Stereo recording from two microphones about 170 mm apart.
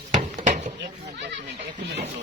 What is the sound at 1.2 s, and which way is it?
Speech, 85° right.